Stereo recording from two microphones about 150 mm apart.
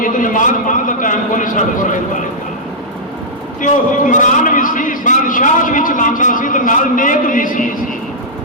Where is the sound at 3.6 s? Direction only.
60° left (ahead or behind).